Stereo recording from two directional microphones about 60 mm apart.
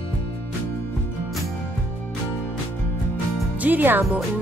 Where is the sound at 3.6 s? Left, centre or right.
Right.